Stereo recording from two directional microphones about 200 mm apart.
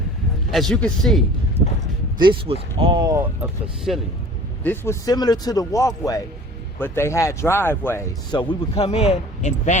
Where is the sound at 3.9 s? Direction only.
Centre (ahead or behind).